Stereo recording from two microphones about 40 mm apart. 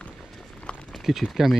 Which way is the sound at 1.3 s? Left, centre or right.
Centre.